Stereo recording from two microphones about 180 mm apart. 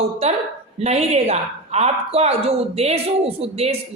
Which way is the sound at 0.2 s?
35° right (ahead or behind).